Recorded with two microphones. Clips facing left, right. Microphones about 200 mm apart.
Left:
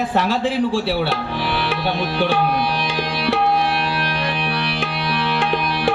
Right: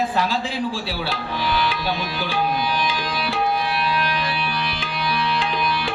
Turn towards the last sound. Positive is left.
turn(degrees=70)  # may be behind; listen again after turning